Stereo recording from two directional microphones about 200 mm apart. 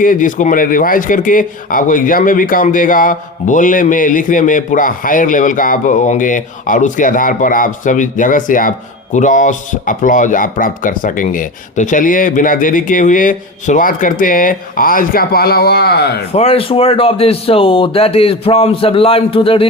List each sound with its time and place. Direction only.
0.0 s speech: 40° left (ahead or behind)
16.3 s a man's voice: 30° left (ahead or behind)